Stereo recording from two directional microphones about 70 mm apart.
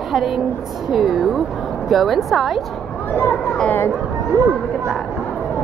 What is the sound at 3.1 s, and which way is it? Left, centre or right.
Speech, left.